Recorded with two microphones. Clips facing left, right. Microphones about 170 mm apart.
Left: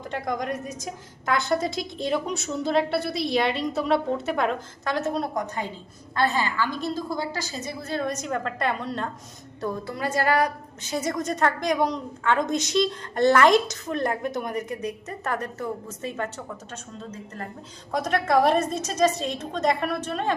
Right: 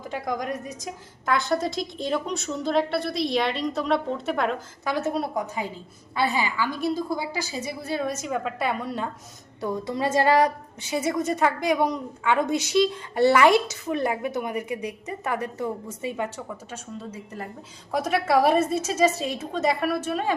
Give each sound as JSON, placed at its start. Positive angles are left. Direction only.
{"t": 0.0, "sound": "a woman's voice", "side_deg": 0}
{"t": 9.6, "sound": "a woman's voice", "side_deg": -15}
{"t": 10.8, "sound": "a woman's voice", "side_deg": -10}